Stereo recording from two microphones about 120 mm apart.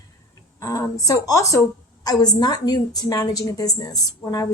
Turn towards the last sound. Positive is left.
turn(degrees=35)  # may be behind; listen again after turning